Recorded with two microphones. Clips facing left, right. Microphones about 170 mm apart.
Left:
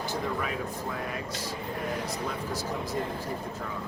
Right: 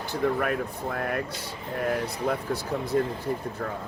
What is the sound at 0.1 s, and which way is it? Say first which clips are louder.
Speech: right 9 dB; 55° right (ahead or behind).